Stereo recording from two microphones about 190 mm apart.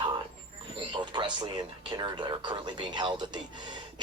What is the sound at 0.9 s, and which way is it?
Speech, 25° right (ahead or behind).